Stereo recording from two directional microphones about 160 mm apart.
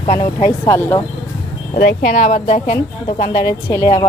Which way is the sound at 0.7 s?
15° left (ahead or behind).